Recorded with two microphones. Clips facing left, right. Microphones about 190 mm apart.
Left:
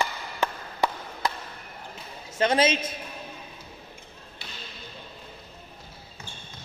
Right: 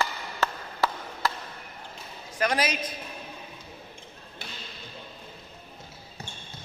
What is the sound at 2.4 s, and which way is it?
Speech, 25° left (ahead or behind).